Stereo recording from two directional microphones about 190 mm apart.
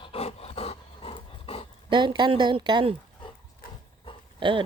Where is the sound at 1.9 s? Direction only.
25° right (ahead or behind).